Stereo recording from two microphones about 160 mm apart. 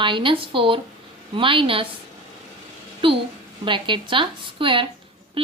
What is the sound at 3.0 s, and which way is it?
Speech, 35° right (ahead or behind).